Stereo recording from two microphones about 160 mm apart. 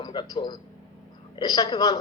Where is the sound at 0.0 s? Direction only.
30° left (ahead or behind).